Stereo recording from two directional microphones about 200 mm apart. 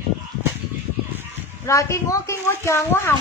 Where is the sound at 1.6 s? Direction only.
15° left (ahead or behind).